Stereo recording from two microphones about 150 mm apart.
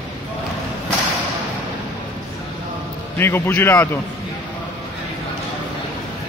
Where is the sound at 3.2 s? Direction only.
15° left (ahead or behind).